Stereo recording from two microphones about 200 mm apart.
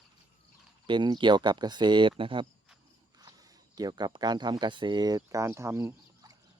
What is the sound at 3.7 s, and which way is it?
Speech, 20° right (ahead or behind).